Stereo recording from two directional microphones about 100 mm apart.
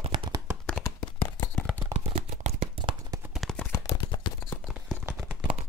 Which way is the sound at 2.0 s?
85° right.